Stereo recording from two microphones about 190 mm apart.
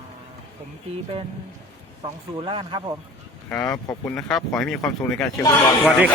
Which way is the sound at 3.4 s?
10° left (ahead or behind).